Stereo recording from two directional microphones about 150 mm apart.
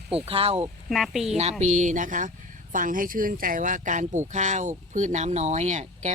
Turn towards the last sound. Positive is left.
turn(degrees=-50)  # may be behind; listen again after turning